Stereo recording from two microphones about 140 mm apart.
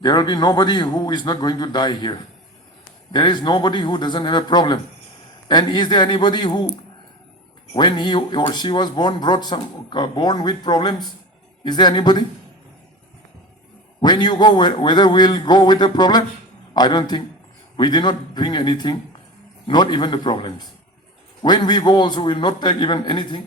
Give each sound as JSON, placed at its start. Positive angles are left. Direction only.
{"t": 0.0, "sound": "speech", "side_deg": 30}
{"t": 7.8, "sound": "speech", "side_deg": 30}
{"t": 14.0, "sound": "speech", "side_deg": 30}